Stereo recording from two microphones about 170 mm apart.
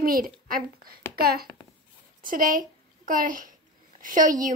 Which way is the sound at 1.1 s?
65° right (ahead or behind).